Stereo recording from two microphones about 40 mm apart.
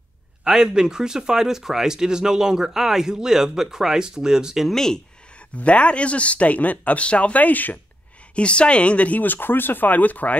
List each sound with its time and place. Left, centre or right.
0.4 s speech: centre
4.7 s speech: centre
5.6 s speech: left
8.4 s speech: left